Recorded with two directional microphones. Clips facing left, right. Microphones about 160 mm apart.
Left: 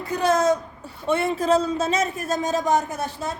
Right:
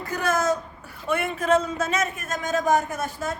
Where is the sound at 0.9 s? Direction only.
30° left (ahead or behind).